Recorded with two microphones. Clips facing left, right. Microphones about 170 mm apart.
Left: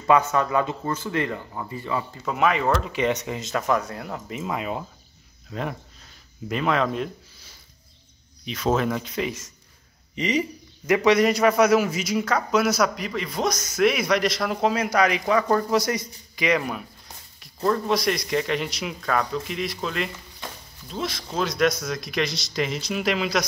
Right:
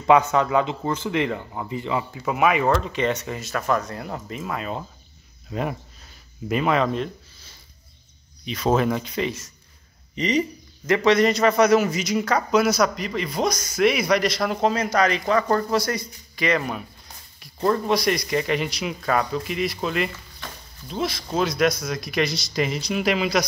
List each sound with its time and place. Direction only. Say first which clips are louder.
0.0 s speech: right 2 dB; 20° right (ahead or behind)
2.1 s speech: right 2 dB; 5° right (ahead or behind)
2.8 s speech: even; 10° left (ahead or behind)
4.3 s speech: left 2 dB; 15° left (ahead or behind)
5.5 s a man's voice: right 3 dB; 10° right (ahead or behind)
8.5 s a man's voice: right 2 dB; centre (ahead or behind)
17.6 s a man's voice: right 2 dB; centre (ahead or behind)
21.3 s a man's voice: right 1 dB; 5° right (ahead or behind)